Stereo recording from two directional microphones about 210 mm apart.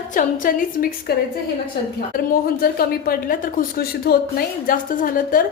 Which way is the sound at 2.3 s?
45° left (ahead or behind).